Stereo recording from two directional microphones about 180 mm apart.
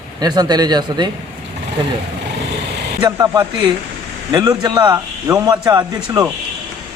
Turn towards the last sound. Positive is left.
turn(degrees=-20)  # may be behind; listen again after turning